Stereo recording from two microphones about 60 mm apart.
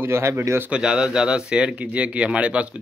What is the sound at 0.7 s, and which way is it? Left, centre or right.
Speech, centre.